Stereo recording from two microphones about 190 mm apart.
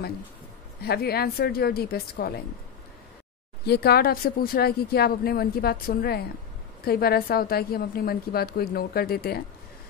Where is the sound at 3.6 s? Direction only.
55° left (ahead or behind).